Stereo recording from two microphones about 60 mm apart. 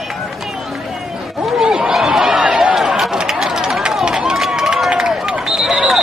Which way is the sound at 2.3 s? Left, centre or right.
Centre.